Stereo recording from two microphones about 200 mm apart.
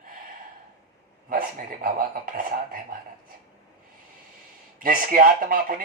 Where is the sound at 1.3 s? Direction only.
45° right (ahead or behind).